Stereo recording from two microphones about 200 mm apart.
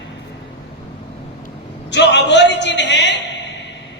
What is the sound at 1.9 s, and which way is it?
A man's voice, 60° left (ahead or behind).